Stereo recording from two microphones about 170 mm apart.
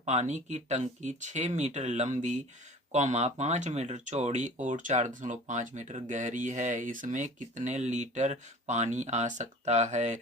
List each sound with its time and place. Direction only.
0.0 s speech: 40° right (ahead or behind)